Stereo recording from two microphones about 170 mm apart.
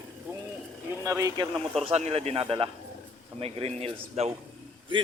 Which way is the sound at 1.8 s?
35° right (ahead or behind).